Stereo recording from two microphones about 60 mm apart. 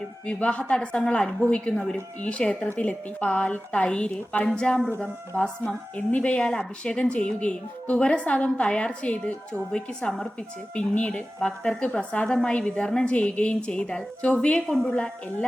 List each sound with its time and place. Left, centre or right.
0.3 s a woman's voice: left
1.7 s speech: centre
2.2 s a woman's voice: centre